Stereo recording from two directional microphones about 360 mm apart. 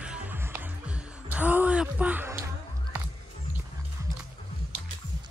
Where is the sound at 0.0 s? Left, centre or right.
Centre.